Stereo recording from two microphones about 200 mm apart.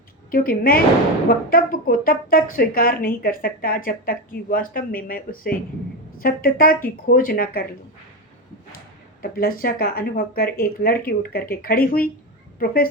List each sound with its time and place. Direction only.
0.3 s a woman's voice: 45° left (ahead or behind)
9.2 s a woman's voice: 45° left (ahead or behind)